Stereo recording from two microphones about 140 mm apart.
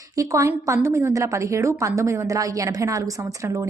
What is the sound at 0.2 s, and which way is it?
A woman's voice, 20° right (ahead or behind).